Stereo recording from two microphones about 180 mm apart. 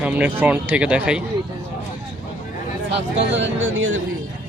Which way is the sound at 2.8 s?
80° right.